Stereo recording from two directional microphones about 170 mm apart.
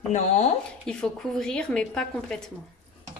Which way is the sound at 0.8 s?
5° left (ahead or behind).